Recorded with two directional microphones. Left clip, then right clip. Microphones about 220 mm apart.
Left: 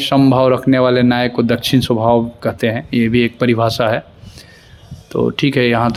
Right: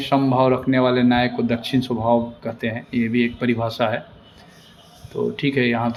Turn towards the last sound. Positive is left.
turn(degrees=55)  # may be behind; listen again after turning